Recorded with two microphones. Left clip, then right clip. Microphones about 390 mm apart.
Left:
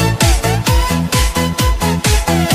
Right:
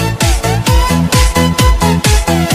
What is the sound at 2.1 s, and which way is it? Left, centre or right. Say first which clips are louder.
Music: right 2 dB; right.